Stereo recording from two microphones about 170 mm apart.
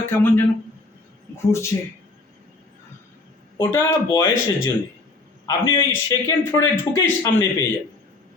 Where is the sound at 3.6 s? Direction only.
15° left (ahead or behind).